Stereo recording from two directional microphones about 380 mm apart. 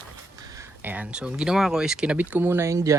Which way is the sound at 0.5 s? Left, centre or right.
Centre.